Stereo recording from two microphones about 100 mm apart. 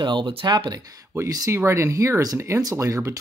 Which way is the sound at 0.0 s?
55° right (ahead or behind).